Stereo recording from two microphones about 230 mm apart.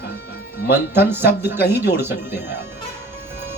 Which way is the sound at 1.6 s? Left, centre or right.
Left.